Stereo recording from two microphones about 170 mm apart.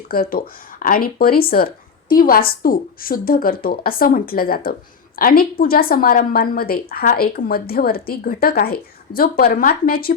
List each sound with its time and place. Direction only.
0.1 s a woman's voice: 60° left (ahead or behind)